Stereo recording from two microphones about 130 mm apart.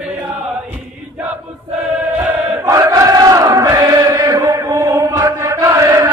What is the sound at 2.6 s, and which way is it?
Chant, 25° right (ahead or behind).